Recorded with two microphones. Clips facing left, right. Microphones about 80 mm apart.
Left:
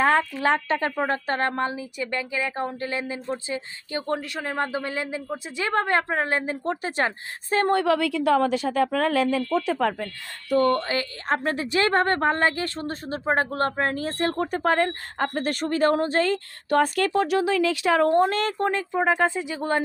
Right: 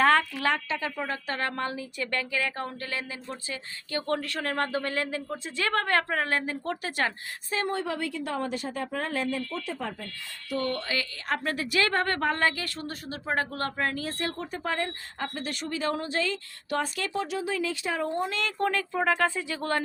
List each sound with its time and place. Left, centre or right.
0.0 s speech: centre
0.7 s a woman's voice: left
7.7 s a woman's voice: left
10.5 s a woman's voice: left
14.3 s speech: left
18.6 s a woman's voice: left